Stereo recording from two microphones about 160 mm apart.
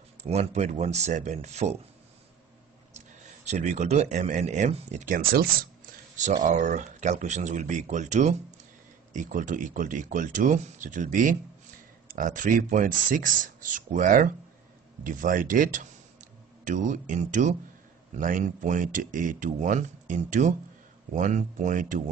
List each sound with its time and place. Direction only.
0.2 s speech: 45° right (ahead or behind)
3.4 s speech: 45° right (ahead or behind); by 5.7 s 65° right (ahead or behind)
6.1 s speech: 50° right (ahead or behind)